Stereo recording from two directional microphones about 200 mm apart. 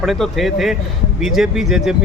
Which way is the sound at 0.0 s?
Centre (ahead or behind).